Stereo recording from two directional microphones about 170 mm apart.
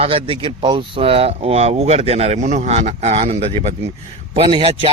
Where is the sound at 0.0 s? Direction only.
35° right (ahead or behind).